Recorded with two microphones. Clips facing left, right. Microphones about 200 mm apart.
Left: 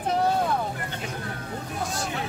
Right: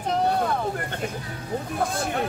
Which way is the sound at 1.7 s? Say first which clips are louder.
Right 4 dB; 55° right (ahead or behind).